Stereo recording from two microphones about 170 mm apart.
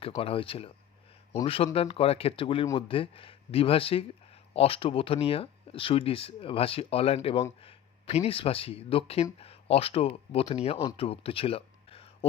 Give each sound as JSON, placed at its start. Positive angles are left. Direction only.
{"t": 0.2, "sound": "speech", "side_deg": 30}